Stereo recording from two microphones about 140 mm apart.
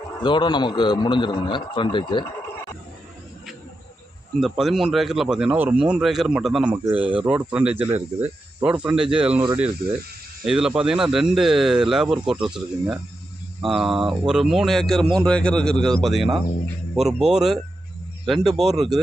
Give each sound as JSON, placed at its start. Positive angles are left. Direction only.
{"t": 0.2, "sound": "a man's voice", "side_deg": 35}
{"t": 4.4, "sound": "speech", "side_deg": 0}
{"t": 7.9, "sound": "speech", "side_deg": -50}
{"t": 8.6, "sound": "speech", "side_deg": -10}
{"t": 10.4, "sound": "speech", "side_deg": -5}